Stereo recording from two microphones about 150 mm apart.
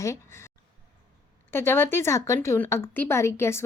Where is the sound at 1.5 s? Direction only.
15° left (ahead or behind).